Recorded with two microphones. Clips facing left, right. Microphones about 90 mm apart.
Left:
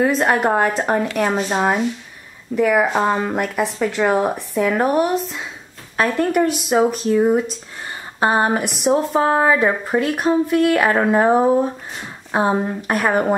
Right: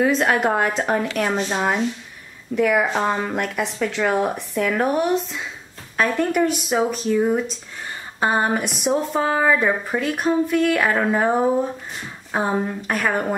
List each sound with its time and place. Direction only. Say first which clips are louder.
0.0 s speech: left 2 dB; centre (ahead or behind)